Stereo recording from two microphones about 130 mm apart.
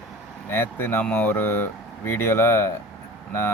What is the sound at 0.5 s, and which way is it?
Speech, 15° left (ahead or behind).